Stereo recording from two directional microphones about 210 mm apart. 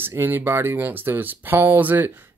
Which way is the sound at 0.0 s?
10° right (ahead or behind).